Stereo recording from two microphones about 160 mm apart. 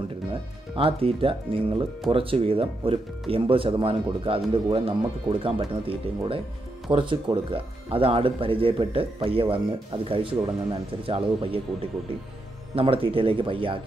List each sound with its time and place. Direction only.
0.3 s speech: 35° right (ahead or behind)